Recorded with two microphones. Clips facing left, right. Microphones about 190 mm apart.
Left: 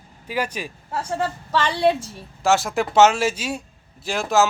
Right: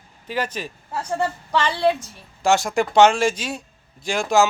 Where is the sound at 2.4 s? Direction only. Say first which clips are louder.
Right 1 dB; centre (ahead or behind).